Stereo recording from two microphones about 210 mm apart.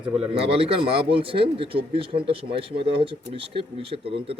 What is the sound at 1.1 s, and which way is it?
Speech, 25° right (ahead or behind).